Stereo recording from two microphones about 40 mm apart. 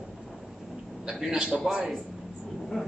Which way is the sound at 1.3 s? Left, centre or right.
Centre.